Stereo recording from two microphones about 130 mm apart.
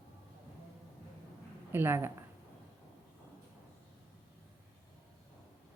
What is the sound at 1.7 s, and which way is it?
Speech, 15° right (ahead or behind).